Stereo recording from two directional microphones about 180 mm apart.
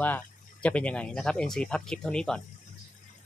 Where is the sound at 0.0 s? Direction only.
10° left (ahead or behind).